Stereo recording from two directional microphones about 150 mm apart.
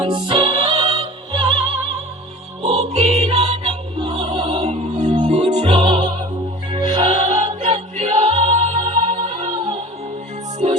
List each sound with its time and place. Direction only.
0.0 s music: 35° right (ahead or behind); by 5.5 s 50° right (ahead or behind)
5.5 s music: 40° right (ahead or behind)